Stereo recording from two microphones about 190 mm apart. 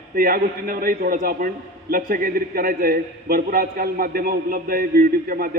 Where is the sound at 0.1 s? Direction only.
50° right (ahead or behind).